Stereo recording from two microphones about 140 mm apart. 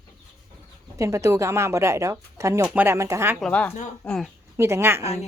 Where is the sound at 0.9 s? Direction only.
20° right (ahead or behind).